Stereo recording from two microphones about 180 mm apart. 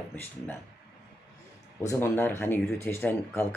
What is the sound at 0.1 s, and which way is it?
Speech, 10° left (ahead or behind).